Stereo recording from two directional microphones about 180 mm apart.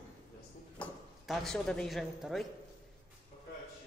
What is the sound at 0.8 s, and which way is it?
Speech, centre (ahead or behind).